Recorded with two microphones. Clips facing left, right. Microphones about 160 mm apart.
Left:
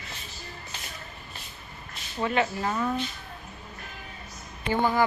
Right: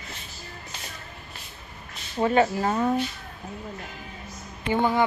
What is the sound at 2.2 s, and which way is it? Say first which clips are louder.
Speech: right 5 dB; 40° right (ahead or behind).